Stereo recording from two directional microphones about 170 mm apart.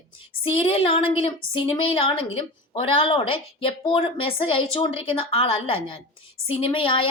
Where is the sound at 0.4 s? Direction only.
30° left (ahead or behind).